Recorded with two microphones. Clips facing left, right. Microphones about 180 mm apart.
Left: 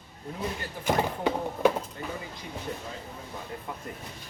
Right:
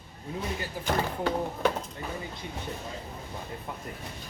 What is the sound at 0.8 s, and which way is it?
Speech, 15° left (ahead or behind).